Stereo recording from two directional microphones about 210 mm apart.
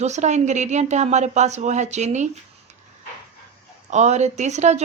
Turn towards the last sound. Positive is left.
turn(degrees=-35)  # may be behind; listen again after turning